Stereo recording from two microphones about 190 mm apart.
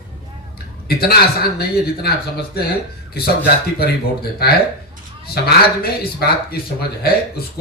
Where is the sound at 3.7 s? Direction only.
55° left (ahead or behind).